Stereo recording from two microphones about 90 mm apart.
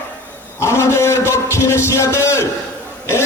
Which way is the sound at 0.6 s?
30° left (ahead or behind).